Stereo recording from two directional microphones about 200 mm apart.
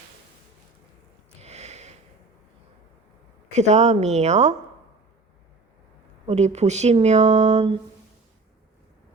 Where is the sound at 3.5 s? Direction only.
35° right (ahead or behind).